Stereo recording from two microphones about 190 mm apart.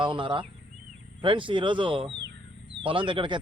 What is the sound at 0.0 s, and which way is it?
Speech, 25° right (ahead or behind).